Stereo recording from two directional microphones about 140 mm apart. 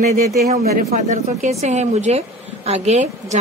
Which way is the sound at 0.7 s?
70° right (ahead or behind).